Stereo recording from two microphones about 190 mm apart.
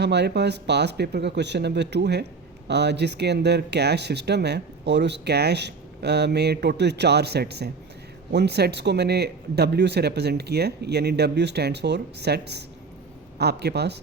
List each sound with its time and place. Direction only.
0.0 s speech: 60° right (ahead or behind)